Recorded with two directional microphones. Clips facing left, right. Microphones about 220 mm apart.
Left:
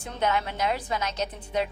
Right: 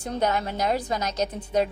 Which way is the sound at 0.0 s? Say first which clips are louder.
Right 2 dB; 40° right (ahead or behind).